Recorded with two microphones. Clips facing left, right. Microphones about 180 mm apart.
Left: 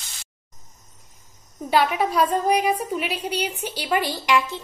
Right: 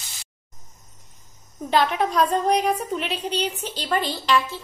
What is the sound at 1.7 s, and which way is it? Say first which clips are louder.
A woman's voice: even; 10° left (ahead or behind).